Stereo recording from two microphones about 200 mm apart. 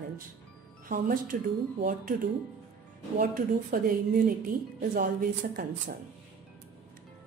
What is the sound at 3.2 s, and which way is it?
A woman's voice, 45° right (ahead or behind).